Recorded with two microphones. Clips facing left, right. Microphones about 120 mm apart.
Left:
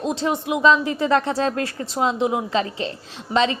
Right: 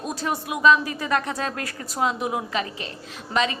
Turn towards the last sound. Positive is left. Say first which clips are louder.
# left 4 dB
turn(degrees=30)  # may be behind; listen again after turning